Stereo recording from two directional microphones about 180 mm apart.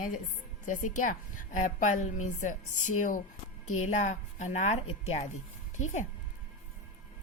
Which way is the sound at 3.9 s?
40° left (ahead or behind).